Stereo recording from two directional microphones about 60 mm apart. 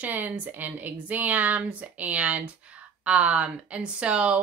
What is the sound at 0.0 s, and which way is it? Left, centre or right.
Speech, right.